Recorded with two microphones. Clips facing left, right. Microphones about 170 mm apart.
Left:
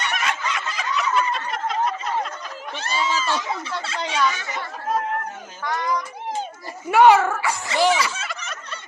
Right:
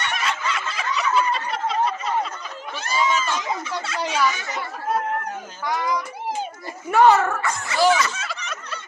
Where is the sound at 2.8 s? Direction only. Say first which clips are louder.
Right 2 dB; 35° left (ahead or behind).